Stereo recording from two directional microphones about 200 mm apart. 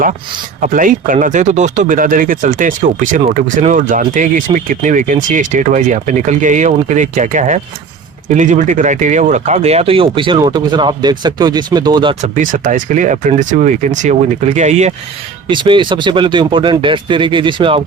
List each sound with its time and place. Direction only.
0.6 s speech: 40° right (ahead or behind); by 12.1 s 20° right (ahead or behind)
12.2 s speech: 40° right (ahead or behind)
15.4 s speech: 25° right (ahead or behind)